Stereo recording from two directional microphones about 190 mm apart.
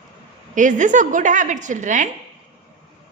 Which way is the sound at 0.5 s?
40° right (ahead or behind).